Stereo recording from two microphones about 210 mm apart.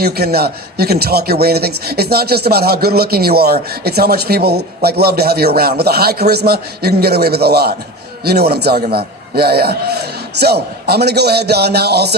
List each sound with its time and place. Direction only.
0.0 s a man's voice: 50° right (ahead or behind)